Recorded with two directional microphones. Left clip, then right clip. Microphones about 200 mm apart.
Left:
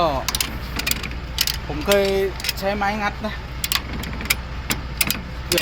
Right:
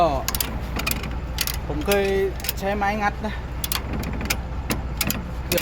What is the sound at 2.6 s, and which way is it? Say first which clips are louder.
Speech: even; 15° left (ahead or behind).